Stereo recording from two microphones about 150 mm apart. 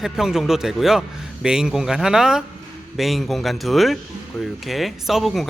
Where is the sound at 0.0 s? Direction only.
5° right (ahead or behind).